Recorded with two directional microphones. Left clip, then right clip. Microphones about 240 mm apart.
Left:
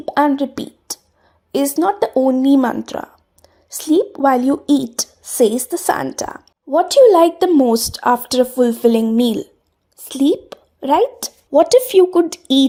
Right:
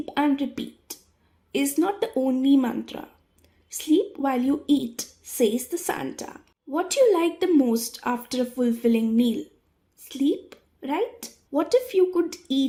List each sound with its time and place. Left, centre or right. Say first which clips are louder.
0.0 s a woman's voice: left 9 dB; left